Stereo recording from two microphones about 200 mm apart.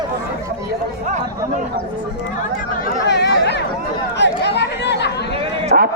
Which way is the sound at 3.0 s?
55° left (ahead or behind).